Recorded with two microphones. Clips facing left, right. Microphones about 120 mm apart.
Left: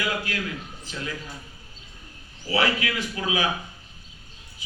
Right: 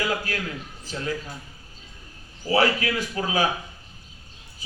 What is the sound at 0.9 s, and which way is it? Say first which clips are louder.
Speech: right 4 dB; 35° right (ahead or behind).